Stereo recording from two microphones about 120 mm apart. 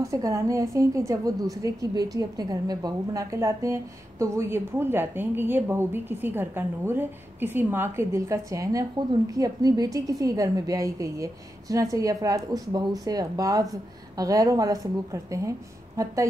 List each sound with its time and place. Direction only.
0.0 s a woman's voice: 25° right (ahead or behind)
16.0 s a woman's voice: 30° right (ahead or behind)